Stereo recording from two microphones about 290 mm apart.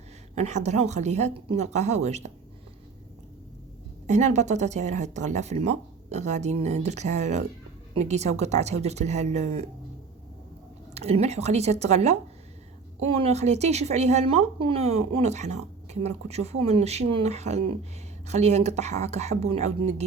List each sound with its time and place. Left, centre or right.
0.3 s speech: right
4.0 s speech: right
10.9 s speech: right